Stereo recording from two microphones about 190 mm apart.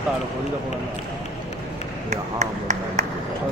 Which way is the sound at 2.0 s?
40° right (ahead or behind).